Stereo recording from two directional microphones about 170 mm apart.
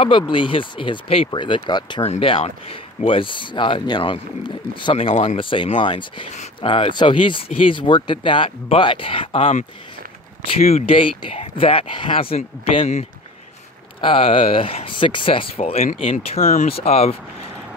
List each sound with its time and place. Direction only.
0.3 s speech: 30° left (ahead or behind)
14.0 s speech: 30° left (ahead or behind)
16.3 s speech: 55° left (ahead or behind)
16.6 s speech: 35° left (ahead or behind)